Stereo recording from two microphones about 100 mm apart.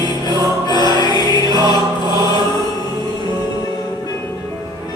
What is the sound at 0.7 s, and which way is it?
Music, 45° left (ahead or behind).